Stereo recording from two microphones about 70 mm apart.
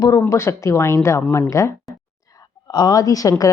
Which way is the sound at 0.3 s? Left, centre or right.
Left.